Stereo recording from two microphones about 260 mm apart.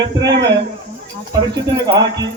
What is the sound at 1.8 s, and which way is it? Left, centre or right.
Speech, centre.